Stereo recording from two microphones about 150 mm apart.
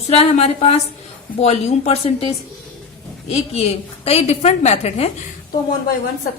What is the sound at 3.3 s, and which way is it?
A woman's voice, 45° left (ahead or behind).